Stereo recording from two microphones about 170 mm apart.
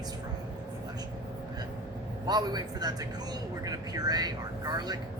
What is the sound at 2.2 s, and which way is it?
Speech, 25° right (ahead or behind).